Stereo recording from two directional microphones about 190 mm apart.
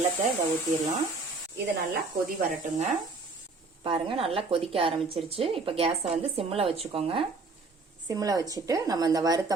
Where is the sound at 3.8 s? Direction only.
30° right (ahead or behind).